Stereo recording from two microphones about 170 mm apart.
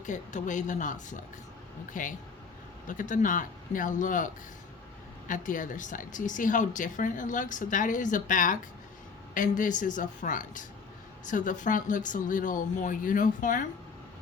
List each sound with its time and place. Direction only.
0.0 s a woman's voice: 50° left (ahead or behind)
5.3 s a woman's voice: 50° left (ahead or behind)